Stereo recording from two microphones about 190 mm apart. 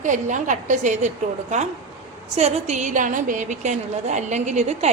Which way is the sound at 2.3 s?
35° right (ahead or behind).